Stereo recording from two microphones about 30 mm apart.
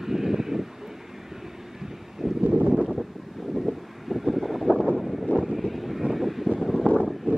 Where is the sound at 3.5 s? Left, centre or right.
Centre.